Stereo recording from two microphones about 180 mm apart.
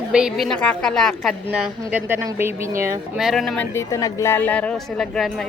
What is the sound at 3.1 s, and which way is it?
Speech, centre (ahead or behind).